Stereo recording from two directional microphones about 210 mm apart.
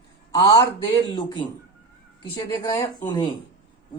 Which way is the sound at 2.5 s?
20° left (ahead or behind).